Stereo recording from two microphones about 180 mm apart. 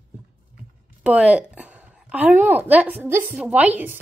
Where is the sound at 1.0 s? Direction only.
5° right (ahead or behind).